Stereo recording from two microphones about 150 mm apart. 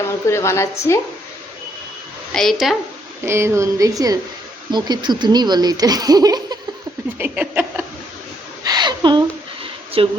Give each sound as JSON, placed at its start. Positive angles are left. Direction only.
{"t": 0.0, "sound": "a woman's voice", "side_deg": 20}
{"t": 2.3, "sound": "a woman's voice", "side_deg": 0}
{"t": 3.2, "sound": "speech", "side_deg": -15}
{"t": 7.2, "sound": "a sound", "side_deg": -15}
{"t": 8.6, "sound": "a sound", "side_deg": -25}
{"t": 10.0, "sound": "a woman's voice", "side_deg": -35}